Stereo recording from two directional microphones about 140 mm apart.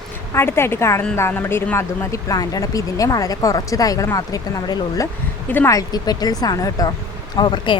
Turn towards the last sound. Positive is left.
turn(degrees=30)  # may be behind; listen again after turning